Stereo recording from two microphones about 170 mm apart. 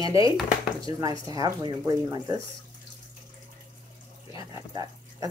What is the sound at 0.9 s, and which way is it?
Speech, 20° right (ahead or behind).